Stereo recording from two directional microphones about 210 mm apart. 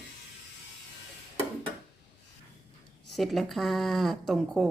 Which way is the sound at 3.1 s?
Centre (ahead or behind).